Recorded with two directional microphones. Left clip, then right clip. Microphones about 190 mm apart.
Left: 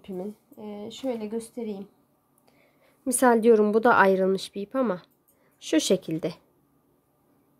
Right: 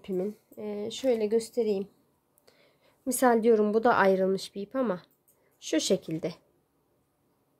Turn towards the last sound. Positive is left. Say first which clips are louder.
# left 3 dB
turn(degrees=15)  # may be behind; listen again after turning